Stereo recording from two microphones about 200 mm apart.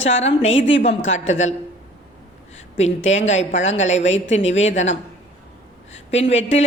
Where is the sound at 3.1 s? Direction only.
35° left (ahead or behind).